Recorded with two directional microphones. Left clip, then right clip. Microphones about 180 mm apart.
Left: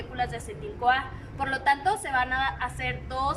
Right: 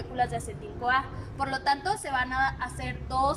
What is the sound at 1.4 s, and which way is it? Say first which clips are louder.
A woman's voice: left 2 dB; 5° right (ahead or behind).